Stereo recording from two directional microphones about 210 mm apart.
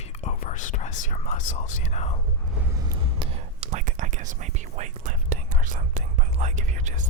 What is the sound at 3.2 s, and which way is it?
Whispering, 35° right (ahead or behind).